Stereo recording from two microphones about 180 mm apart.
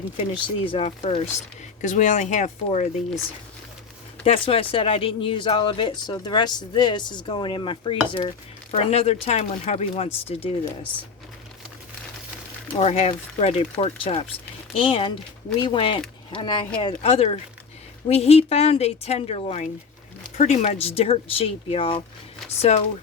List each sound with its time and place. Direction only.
0.2 s speech: 30° left (ahead or behind)
4.2 s speech: 30° left (ahead or behind)
12.7 s speech: 35° left (ahead or behind)